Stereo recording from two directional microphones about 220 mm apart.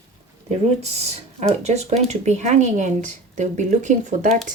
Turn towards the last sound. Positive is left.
turn(degrees=-35)  # may be behind; listen again after turning